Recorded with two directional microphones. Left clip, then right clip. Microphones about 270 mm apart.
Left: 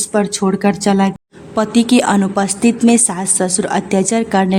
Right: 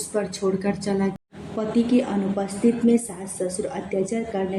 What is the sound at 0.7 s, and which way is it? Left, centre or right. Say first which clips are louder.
A woman's voice: left 10 dB; left.